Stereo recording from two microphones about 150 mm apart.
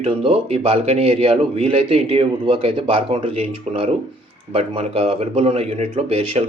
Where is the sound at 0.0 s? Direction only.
40° right (ahead or behind).